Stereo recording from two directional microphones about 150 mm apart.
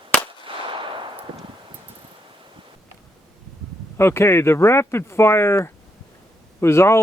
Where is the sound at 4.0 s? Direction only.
15° left (ahead or behind).